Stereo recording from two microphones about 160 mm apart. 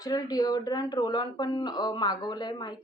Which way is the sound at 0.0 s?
25° left (ahead or behind).